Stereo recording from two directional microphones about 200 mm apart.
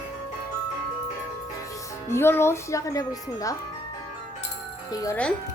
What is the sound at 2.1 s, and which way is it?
Speech, 10° left (ahead or behind).